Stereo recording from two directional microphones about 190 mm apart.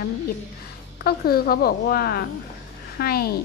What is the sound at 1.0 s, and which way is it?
A woman's voice, 55° left (ahead or behind).